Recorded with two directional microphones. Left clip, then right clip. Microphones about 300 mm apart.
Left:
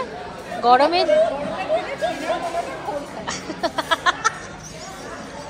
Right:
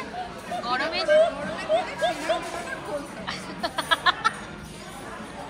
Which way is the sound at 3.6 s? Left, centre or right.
Centre.